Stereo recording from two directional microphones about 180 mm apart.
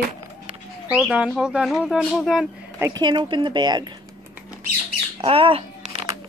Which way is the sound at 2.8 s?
25° right (ahead or behind).